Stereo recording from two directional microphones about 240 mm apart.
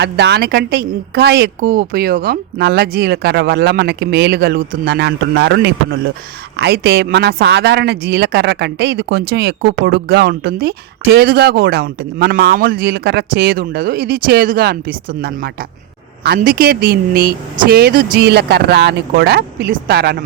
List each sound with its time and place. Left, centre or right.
0.0 s speech: right